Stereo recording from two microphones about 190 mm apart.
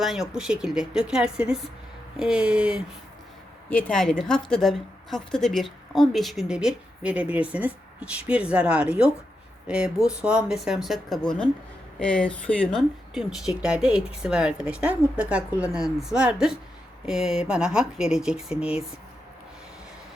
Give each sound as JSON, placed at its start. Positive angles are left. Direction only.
{"t": 0.0, "sound": "a woman's voice", "side_deg": 0}
{"t": 3.7, "sound": "a woman's voice", "side_deg": 5}